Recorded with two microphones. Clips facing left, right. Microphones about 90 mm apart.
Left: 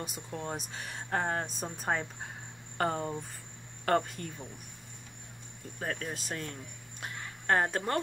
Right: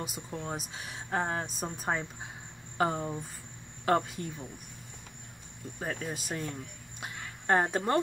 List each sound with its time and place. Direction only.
0.0 s speech: centre (ahead or behind)
5.8 s speech: 15° right (ahead or behind)
7.0 s a sound: 20° right (ahead or behind)